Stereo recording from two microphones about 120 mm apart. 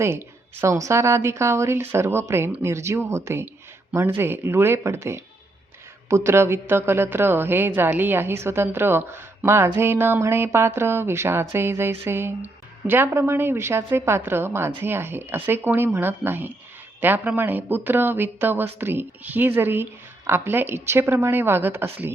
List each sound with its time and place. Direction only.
0.0 s a woman's voice: 20° right (ahead or behind)